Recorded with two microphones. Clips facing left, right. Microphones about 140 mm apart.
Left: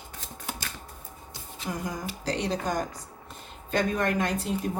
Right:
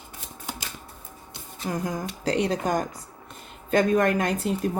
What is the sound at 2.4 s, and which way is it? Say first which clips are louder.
A woman's voice: right 4 dB; 55° right (ahead or behind).